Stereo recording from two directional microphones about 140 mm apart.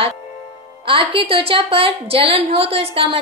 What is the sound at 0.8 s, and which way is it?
A woman's voice, 40° right (ahead or behind).